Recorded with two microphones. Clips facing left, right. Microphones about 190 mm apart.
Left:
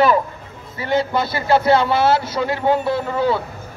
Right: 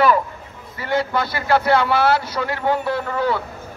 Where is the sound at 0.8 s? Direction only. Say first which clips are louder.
Left 2 dB; 15° left (ahead or behind).